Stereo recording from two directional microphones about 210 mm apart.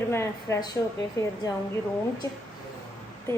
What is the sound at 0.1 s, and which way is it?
A woman's voice, 15° left (ahead or behind).